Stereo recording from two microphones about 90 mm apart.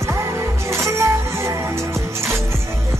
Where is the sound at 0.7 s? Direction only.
30° right (ahead or behind).